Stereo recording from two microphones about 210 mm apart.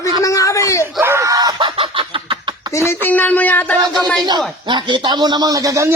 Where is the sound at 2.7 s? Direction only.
10° left (ahead or behind).